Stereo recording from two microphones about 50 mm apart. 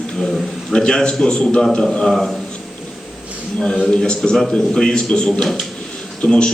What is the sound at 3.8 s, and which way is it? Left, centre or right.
A man's voice, centre.